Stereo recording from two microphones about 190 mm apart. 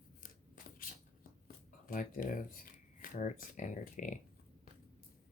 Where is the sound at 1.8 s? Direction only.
45° left (ahead or behind).